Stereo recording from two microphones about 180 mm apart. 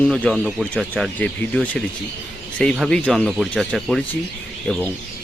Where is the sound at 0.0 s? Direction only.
5° left (ahead or behind).